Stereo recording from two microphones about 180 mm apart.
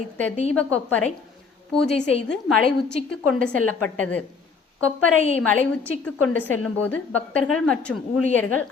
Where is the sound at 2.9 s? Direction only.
55° right (ahead or behind).